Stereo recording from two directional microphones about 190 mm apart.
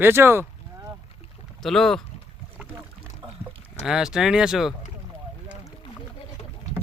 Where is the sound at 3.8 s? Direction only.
5° right (ahead or behind).